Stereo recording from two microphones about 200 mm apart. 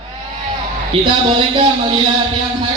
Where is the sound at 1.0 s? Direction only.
25° right (ahead or behind).